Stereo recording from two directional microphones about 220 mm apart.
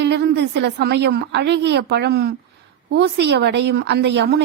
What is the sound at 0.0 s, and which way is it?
A woman's voice, 50° right (ahead or behind).